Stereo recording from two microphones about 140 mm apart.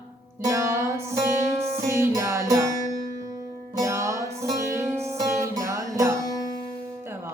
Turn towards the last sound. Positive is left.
turn(degrees=25)  # may be behind; listen again after turning